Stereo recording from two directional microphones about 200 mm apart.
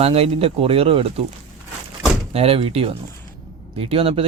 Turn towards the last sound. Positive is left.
turn(degrees=-30)  # may be behind; listen again after turning